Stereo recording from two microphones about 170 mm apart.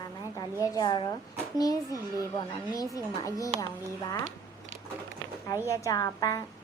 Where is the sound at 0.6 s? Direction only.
20° left (ahead or behind).